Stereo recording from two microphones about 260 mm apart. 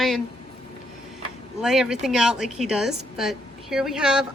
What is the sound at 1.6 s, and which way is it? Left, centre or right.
A woman's voice, centre.